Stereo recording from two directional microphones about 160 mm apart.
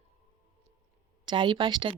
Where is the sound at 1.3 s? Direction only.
30° right (ahead or behind).